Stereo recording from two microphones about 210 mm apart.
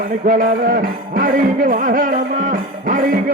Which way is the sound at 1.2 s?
40° right (ahead or behind).